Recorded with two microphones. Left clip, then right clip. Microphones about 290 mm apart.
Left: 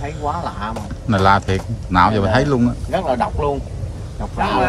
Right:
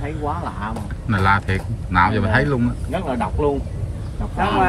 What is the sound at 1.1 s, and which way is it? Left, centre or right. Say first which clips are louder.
Speech: left 4 dB; centre.